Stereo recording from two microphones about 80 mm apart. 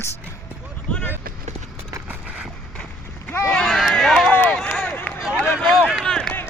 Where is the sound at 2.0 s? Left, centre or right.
Centre.